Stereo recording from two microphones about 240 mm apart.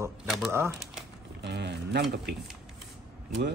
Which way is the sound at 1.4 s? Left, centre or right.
Right.